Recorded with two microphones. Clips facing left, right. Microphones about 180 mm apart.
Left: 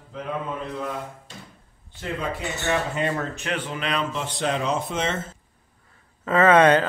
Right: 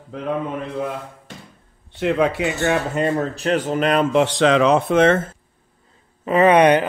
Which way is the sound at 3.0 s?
35° right (ahead or behind).